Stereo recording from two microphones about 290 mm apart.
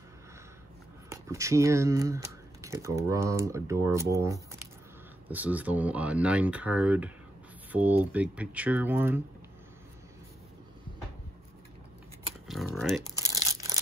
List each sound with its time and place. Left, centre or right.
1.1 s speech: centre
12.4 s typing: centre
13.2 s crumpling: centre